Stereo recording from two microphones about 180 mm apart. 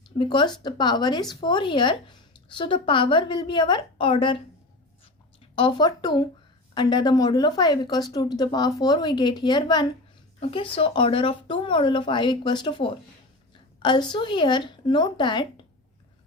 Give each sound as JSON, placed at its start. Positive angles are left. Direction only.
{"t": 0.2, "sound": "speech", "side_deg": 25}
{"t": 5.5, "sound": "speech", "side_deg": 25}